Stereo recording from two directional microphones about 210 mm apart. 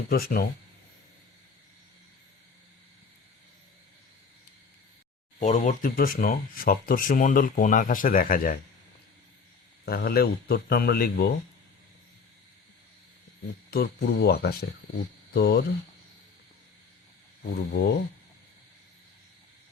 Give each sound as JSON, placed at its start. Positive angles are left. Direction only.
{"t": 0.1, "sound": "speech", "side_deg": 45}
{"t": 5.4, "sound": "speech", "side_deg": 35}
{"t": 9.8, "sound": "speech", "side_deg": 45}
{"t": 13.7, "sound": "speech", "side_deg": 50}
{"t": 17.5, "sound": "speech", "side_deg": 50}